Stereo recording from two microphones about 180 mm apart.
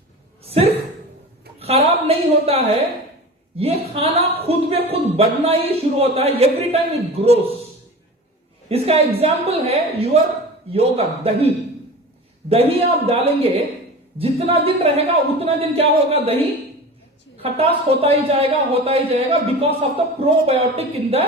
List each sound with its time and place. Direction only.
0.4 s a sound: 35° right (ahead or behind)
1.5 s speech: 35° right (ahead or behind)
8.7 s speech: 35° right (ahead or behind)
12.5 s speech: 35° right (ahead or behind)
17.4 s speech: 35° right (ahead or behind)